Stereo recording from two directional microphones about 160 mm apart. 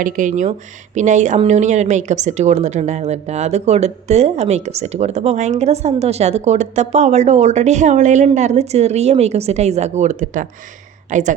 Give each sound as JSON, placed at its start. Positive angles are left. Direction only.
{"t": 0.0, "sound": "a woman's voice", "side_deg": -50}